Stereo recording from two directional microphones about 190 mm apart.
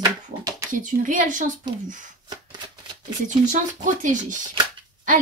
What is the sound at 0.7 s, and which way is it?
Speech, 45° right (ahead or behind).